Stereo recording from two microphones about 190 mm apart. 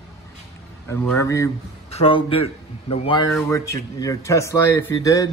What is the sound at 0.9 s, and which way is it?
Speech, 10° left (ahead or behind).